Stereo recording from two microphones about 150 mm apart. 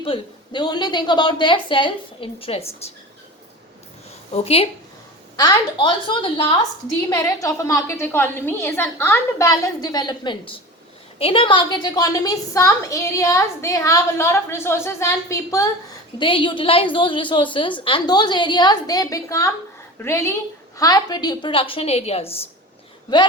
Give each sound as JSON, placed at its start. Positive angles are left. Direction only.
{"t": 0.0, "sound": "a woman's voice", "side_deg": 35}
{"t": 4.3, "sound": "a woman's voice", "side_deg": 40}
{"t": 5.4, "sound": "a woman's voice", "side_deg": 30}
{"t": 7.3, "sound": "a woman's voice", "side_deg": 20}
{"t": 16.1, "sound": "a woman's voice", "side_deg": 35}